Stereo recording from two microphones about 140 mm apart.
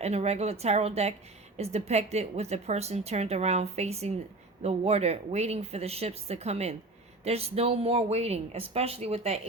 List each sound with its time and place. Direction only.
0.0 s a woman's voice: 50° right (ahead or behind)